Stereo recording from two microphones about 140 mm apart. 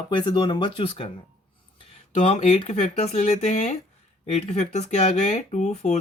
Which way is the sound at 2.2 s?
50° left (ahead or behind).